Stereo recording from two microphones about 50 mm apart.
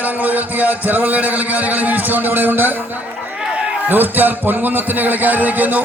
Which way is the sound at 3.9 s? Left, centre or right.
Right.